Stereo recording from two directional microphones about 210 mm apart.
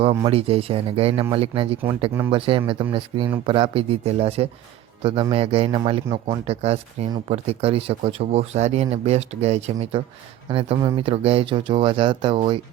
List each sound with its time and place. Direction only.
0.3 s speech: 30° right (ahead or behind)